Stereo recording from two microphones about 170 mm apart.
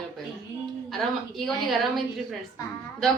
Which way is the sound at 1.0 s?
Centre (ahead or behind).